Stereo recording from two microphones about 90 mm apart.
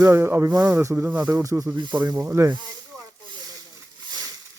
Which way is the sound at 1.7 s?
55° right (ahead or behind).